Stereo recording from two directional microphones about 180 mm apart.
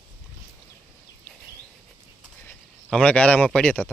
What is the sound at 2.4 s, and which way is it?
Speech, 10° left (ahead or behind).